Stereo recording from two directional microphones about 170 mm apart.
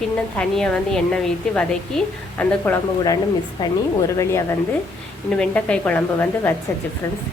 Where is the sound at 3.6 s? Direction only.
25° left (ahead or behind).